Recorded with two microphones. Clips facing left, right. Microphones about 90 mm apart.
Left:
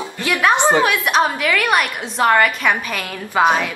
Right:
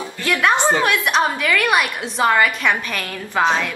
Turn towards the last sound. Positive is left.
turn(degrees=10)  # may be behind; listen again after turning